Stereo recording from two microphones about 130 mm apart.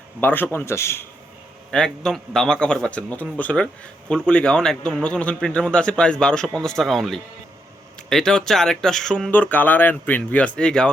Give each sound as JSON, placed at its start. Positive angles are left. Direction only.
{"t": 0.2, "sound": "a man's voice", "side_deg": 15}
{"t": 1.7, "sound": "a man's voice", "side_deg": 5}